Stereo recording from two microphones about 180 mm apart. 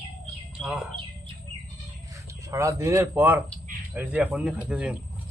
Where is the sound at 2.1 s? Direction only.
15° right (ahead or behind).